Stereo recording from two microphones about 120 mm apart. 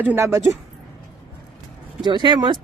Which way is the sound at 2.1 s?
40° right (ahead or behind).